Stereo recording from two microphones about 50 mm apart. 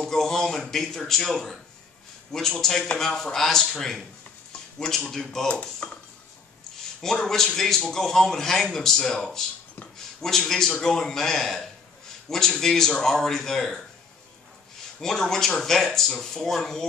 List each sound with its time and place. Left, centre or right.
0.0 s speech: centre
2.6 s speech: centre
5.5 s speech: left
7.0 s speech: centre
15.0 s speech: centre